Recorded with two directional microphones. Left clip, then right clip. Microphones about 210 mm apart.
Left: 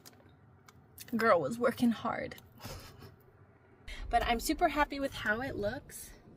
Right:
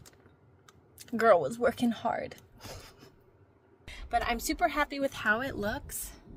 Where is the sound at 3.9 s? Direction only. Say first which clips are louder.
Even; 10° right (ahead or behind).